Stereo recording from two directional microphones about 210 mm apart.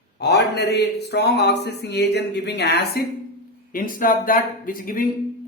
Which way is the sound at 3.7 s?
40° left (ahead or behind).